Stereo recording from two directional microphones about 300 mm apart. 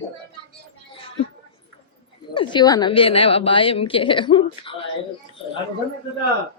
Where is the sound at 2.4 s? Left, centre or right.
Centre.